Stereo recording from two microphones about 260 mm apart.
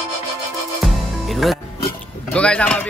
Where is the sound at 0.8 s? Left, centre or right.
Centre.